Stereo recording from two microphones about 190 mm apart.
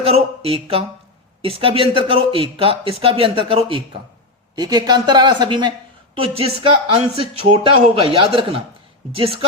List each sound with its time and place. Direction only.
0.0 s speech: 30° right (ahead or behind)